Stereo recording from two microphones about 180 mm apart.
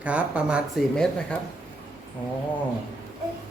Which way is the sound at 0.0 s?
5° right (ahead or behind).